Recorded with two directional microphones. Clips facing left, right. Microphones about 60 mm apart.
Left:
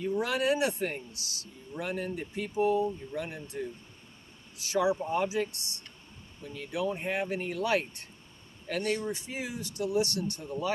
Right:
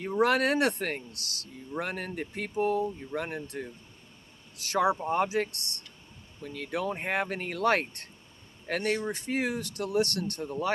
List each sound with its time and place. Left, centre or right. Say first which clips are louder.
0.0 s speech: right 4 dB; right